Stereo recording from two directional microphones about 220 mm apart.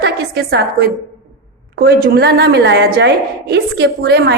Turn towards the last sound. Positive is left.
turn(degrees=-50)  # may be behind; listen again after turning